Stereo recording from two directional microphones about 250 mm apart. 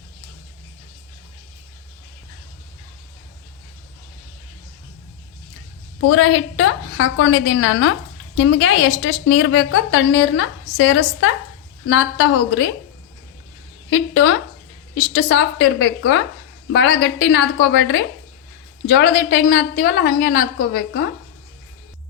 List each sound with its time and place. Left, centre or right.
6.1 s a woman's voice: left
13.9 s a woman's voice: left